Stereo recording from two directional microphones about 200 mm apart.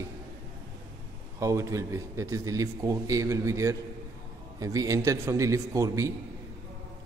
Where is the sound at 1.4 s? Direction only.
15° right (ahead or behind).